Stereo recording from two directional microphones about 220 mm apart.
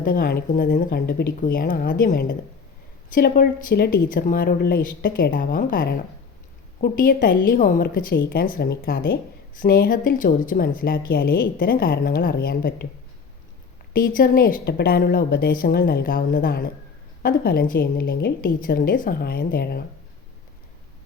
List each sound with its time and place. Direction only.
0.0 s speech: 40° left (ahead or behind)
13.9 s a woman's voice: 40° left (ahead or behind)